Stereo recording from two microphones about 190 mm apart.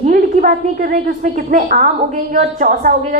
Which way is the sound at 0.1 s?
50° right (ahead or behind).